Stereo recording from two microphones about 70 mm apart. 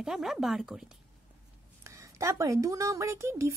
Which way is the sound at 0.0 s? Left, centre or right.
Centre.